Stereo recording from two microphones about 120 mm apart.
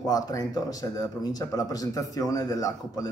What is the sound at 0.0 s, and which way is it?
A man's voice, 30° left (ahead or behind).